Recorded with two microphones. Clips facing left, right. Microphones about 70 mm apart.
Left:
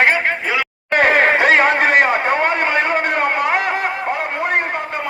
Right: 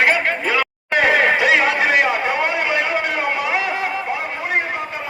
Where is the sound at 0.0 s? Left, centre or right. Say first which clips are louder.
Left 2 dB; left.